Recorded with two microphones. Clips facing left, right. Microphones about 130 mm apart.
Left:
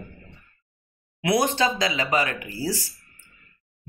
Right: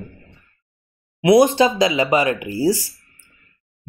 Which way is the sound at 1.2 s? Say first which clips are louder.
Right 9 dB; 15° right (ahead or behind).